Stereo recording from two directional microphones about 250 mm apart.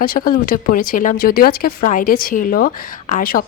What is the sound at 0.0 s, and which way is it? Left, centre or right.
Speech, left.